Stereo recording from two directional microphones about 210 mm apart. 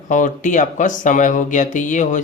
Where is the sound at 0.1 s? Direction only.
35° left (ahead or behind).